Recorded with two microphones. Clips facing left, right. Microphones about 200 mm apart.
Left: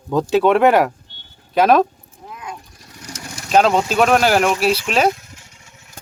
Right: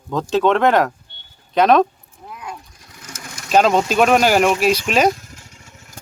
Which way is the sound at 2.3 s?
Centre (ahead or behind).